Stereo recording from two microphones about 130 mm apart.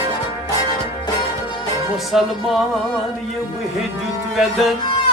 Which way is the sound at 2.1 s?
Centre (ahead or behind).